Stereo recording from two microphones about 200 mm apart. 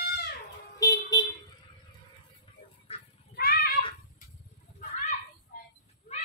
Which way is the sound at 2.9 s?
30° left (ahead or behind).